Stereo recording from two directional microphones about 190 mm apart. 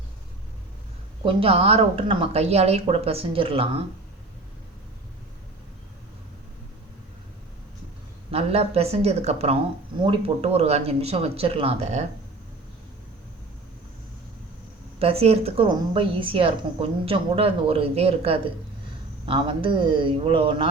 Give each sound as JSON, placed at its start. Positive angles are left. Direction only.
{"t": 1.2, "sound": "a woman's voice", "side_deg": -30}
{"t": 8.3, "sound": "a woman's voice", "side_deg": -30}
{"t": 14.9, "sound": "a woman's voice", "side_deg": -30}